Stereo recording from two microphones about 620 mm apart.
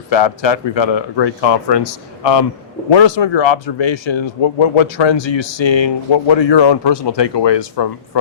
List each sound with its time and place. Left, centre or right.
0.1 s speech: left